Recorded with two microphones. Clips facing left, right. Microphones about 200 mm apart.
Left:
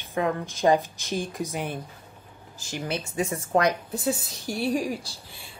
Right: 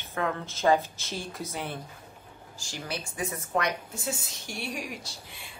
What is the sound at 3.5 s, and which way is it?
A woman's voice, 35° left (ahead or behind).